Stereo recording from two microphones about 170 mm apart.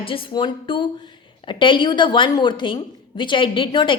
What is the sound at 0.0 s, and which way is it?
A woman's voice, 30° left (ahead or behind).